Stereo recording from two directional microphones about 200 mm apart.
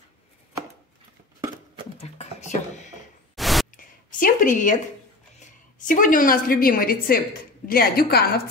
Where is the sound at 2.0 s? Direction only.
35° left (ahead or behind).